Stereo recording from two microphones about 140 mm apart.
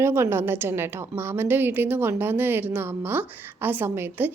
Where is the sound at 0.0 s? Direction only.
15° right (ahead or behind).